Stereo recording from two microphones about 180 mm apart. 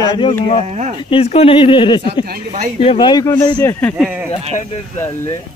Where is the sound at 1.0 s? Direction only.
30° left (ahead or behind).